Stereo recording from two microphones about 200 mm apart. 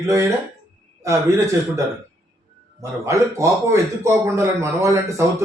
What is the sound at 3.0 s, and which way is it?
Speech, 15° right (ahead or behind).